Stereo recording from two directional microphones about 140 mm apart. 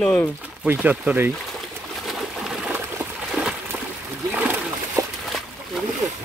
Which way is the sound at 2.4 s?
5° right (ahead or behind).